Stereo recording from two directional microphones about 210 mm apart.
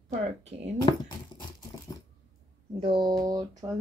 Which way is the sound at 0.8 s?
20° left (ahead or behind).